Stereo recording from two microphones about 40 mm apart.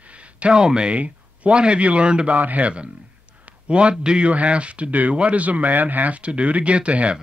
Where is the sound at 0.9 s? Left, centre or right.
Right.